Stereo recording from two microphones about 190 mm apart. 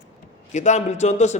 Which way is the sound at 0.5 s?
40° left (ahead or behind).